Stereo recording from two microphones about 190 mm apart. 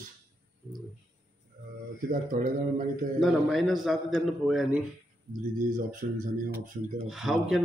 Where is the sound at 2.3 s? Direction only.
45° right (ahead or behind).